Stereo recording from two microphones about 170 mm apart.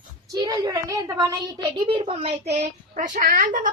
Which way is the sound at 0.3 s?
20° right (ahead or behind).